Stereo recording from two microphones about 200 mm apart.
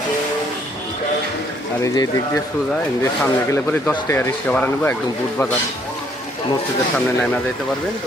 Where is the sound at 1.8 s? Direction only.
20° left (ahead or behind).